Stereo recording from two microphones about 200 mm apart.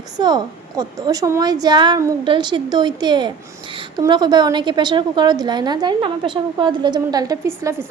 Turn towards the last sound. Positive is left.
turn(degrees=-15)  # may be behind; listen again after turning